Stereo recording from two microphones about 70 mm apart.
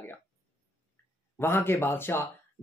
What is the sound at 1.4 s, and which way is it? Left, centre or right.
Speech, left.